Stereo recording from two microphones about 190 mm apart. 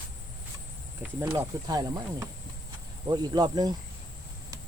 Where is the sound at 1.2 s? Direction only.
20° right (ahead or behind).